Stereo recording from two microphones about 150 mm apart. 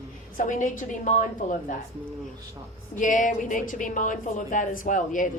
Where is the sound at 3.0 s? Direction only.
60° left (ahead or behind).